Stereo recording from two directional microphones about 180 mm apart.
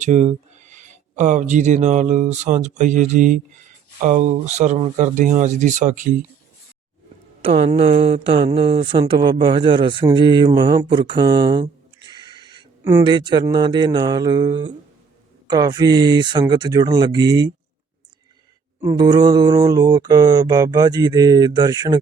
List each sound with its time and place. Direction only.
0.0 s speech: 40° right (ahead or behind)
7.4 s speech: 30° right (ahead or behind)
18.8 s speech: 20° right (ahead or behind)